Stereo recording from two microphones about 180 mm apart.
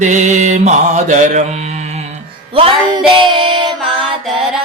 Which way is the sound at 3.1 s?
25° right (ahead or behind).